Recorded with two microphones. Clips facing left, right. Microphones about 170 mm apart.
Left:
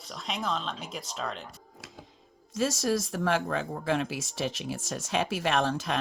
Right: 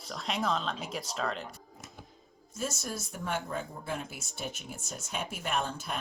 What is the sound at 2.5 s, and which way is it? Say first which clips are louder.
Speech: left 9 dB; 90° left.